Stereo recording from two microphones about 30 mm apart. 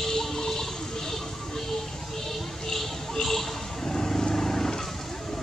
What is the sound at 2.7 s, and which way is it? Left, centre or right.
Vehicle, centre.